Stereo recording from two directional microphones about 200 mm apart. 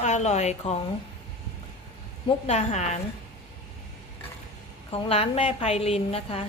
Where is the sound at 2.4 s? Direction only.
35° left (ahead or behind).